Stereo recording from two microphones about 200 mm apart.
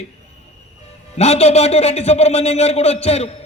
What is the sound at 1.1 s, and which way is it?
A man's voice, 30° left (ahead or behind).